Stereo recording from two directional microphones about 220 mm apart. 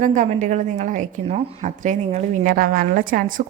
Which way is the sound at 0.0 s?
35° right (ahead or behind).